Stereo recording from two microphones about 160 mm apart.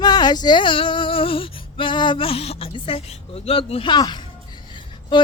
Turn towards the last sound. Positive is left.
turn(degrees=30)  # may be behind; listen again after turning